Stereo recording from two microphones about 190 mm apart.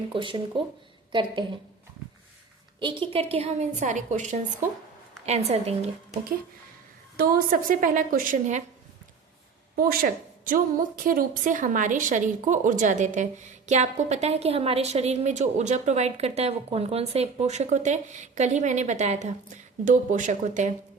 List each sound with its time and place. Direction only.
0.1 s speech: 25° right (ahead or behind)
2.8 s a woman's voice: 30° right (ahead or behind)
7.2 s a woman's voice: 50° right (ahead or behind)
9.7 s a woman's voice: 50° right (ahead or behind)